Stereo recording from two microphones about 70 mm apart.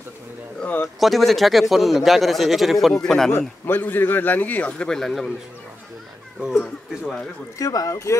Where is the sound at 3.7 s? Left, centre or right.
Left; by 5.3 s centre.